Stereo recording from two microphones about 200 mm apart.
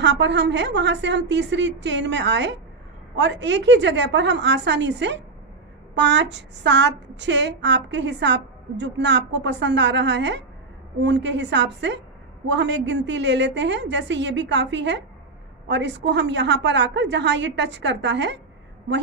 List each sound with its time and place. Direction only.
0.0 s a woman's voice: 60° right (ahead or behind)